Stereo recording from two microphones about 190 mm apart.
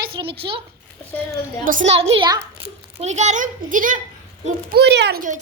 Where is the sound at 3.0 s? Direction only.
35° right (ahead or behind).